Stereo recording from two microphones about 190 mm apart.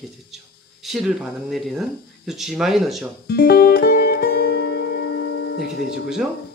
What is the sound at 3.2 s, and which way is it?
Music, 55° left (ahead or behind).